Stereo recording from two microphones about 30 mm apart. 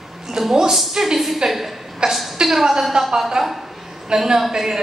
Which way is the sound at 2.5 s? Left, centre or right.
Centre.